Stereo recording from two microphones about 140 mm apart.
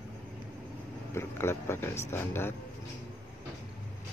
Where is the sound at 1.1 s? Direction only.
20° left (ahead or behind).